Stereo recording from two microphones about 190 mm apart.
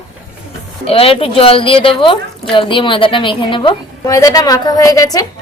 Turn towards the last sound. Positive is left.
turn(degrees=20)  # may be behind; listen again after turning